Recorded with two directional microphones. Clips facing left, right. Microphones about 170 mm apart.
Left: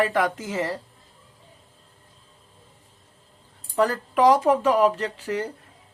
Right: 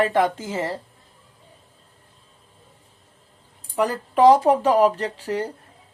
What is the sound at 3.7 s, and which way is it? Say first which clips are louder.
Speech: left 1 dB; 15° right (ahead or behind).